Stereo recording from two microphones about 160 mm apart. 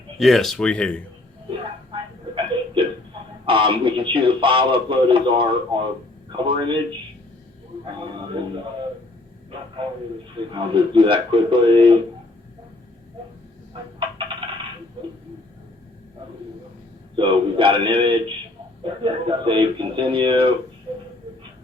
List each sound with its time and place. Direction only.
0.2 s speech: centre (ahead or behind)
1.5 s a sound: 30° right (ahead or behind)
3.4 s speech: 30° right (ahead or behind)
10.5 s speech: 30° right (ahead or behind)
17.2 s speech: 30° right (ahead or behind)